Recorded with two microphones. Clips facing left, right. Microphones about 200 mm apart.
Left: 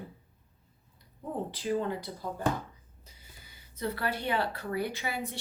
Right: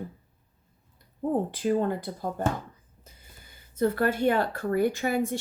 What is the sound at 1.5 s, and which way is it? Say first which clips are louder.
Speech: right 5 dB; 50° right (ahead or behind).